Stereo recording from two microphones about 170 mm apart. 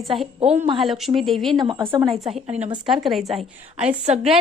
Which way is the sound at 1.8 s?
15° right (ahead or behind).